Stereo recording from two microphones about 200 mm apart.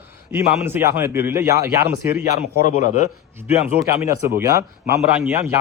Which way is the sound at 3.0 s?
10° right (ahead or behind).